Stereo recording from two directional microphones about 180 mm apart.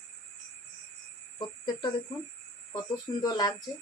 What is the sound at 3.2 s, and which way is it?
Speech, 25° left (ahead or behind).